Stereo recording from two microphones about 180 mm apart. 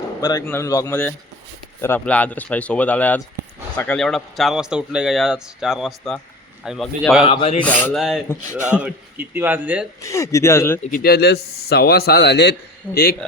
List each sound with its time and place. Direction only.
0.4 s speech: 15° left (ahead or behind)
7.3 s speech: 35° left (ahead or behind)
7.6 s speech: 10° left (ahead or behind)
8.7 s a man's voice: 10° right (ahead or behind)
10.0 s speech: 15° left (ahead or behind)
10.9 s a man's voice: 60° left (ahead or behind)